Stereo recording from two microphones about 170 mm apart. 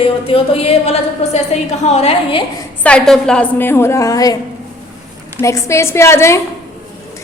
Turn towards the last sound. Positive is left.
turn(degrees=15)  # may be behind; listen again after turning